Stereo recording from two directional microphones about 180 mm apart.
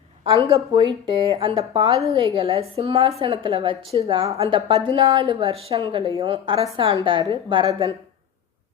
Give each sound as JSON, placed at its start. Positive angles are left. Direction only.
{"t": 0.5, "sound": "a woman's voice", "side_deg": -25}